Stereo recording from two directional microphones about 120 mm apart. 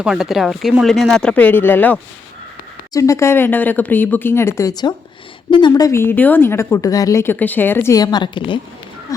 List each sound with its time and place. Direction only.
0.0 s speech: 5° right (ahead or behind); by 2.0 s 15° left (ahead or behind)
2.9 s a woman's voice: 25° left (ahead or behind)
7.9 s a woman's voice: 35° left (ahead or behind)